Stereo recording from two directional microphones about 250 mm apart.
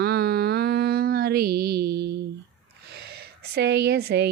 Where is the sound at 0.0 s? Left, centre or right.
Right.